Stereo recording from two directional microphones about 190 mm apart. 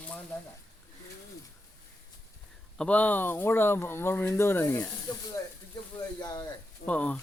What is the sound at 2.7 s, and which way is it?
Speech, 5° left (ahead or behind).